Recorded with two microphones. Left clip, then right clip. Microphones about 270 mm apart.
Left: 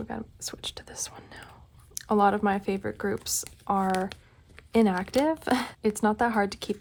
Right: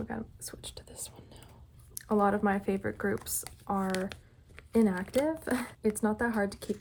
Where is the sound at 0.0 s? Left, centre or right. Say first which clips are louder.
Left 3 dB; centre.